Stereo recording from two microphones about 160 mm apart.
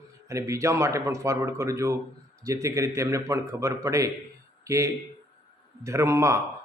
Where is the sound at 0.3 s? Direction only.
20° right (ahead or behind).